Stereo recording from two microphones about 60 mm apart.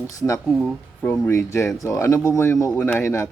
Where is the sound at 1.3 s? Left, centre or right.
Left.